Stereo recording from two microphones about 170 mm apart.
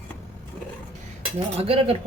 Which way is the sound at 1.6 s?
35° right (ahead or behind).